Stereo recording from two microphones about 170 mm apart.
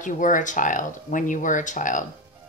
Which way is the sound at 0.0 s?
50° left (ahead or behind).